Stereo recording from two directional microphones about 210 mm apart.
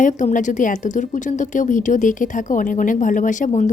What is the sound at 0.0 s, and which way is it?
A woman's voice, 35° left (ahead or behind).